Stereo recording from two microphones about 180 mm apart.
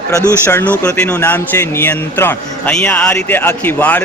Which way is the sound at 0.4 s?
10° left (ahead or behind).